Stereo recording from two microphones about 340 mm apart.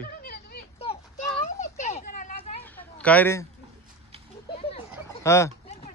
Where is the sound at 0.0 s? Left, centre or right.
Left.